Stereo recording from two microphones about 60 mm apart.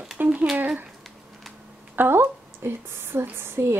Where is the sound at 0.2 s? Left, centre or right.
Right.